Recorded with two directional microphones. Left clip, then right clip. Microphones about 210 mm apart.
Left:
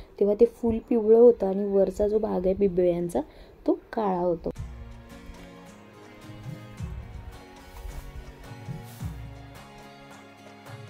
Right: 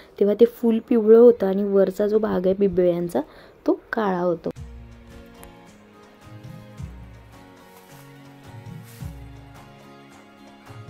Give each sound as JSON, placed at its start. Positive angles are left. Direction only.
{"t": 0.1, "sound": "speech", "side_deg": -20}